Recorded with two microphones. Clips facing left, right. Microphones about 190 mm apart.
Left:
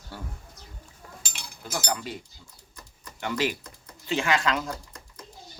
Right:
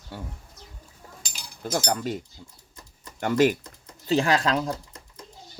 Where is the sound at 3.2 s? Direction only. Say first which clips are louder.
Right 7 dB; 45° right (ahead or behind).